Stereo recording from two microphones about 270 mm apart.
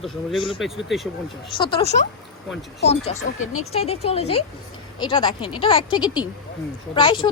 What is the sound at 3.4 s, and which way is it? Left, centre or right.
Speech, left.